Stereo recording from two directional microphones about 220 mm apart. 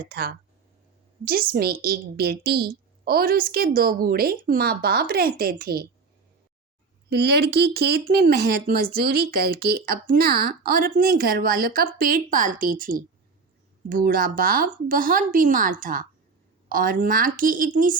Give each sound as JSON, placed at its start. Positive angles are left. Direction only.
{"t": 0.0, "sound": "speech", "side_deg": -45}
{"t": 7.1, "sound": "speech", "side_deg": -45}